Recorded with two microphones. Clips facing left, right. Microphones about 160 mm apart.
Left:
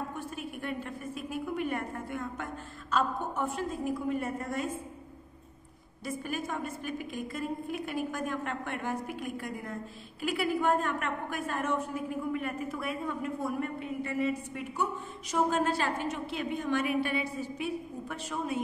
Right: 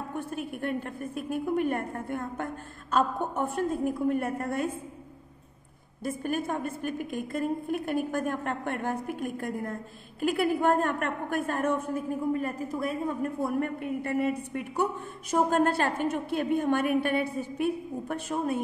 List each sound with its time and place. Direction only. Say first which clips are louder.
0.1 s a woman's voice: right 5 dB; 55° right (ahead or behind)
6.0 s a woman's voice: right 5 dB; 50° right (ahead or behind)
12.3 s a woman's voice: right 4 dB; 35° right (ahead or behind)